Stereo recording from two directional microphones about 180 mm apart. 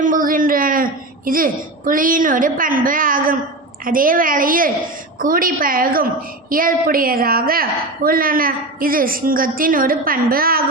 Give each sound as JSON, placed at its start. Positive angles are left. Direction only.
{"t": 0.0, "sound": "a woman's voice", "side_deg": -50}